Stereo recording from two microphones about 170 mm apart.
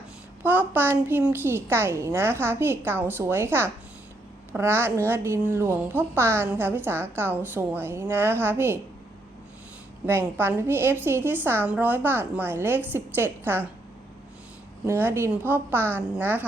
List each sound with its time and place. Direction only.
0.4 s a woman's voice: 10° right (ahead or behind)
10.1 s a woman's voice: 15° right (ahead or behind)
14.8 s a woman's voice: 15° right (ahead or behind)